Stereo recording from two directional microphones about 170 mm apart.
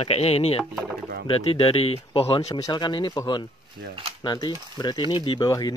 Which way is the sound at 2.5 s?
25° left (ahead or behind).